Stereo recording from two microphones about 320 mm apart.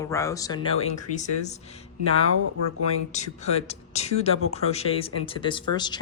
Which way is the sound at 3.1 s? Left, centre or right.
Left.